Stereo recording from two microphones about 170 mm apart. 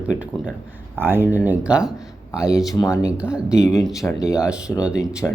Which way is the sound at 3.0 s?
5° right (ahead or behind).